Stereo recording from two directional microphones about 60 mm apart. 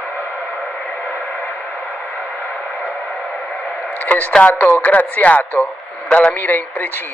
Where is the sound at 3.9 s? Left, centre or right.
Left.